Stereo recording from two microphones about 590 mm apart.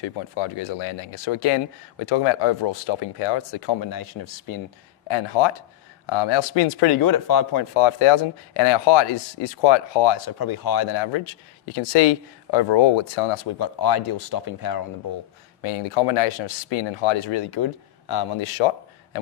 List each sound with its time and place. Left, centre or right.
0.3 s speech: left
5.0 s speech: left
15.6 s speech: left